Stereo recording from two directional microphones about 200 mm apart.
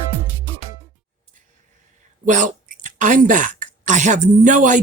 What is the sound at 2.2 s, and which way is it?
Speech, 40° right (ahead or behind).